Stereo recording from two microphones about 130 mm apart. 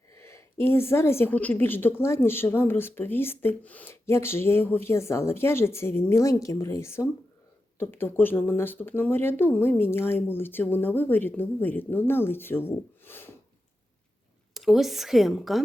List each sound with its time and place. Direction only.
0.2 s a woman's voice: 20° left (ahead or behind)
14.5 s a woman's voice: centre (ahead or behind)